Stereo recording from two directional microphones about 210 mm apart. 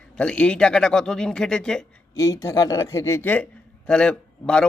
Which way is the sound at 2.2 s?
15° left (ahead or behind).